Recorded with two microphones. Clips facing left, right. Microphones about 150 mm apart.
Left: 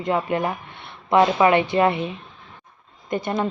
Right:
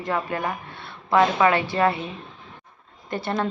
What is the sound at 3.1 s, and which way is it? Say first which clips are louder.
Speech: left 2 dB; 15° left (ahead or behind).